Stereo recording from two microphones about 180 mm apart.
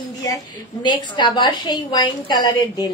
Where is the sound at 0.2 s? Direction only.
20° left (ahead or behind).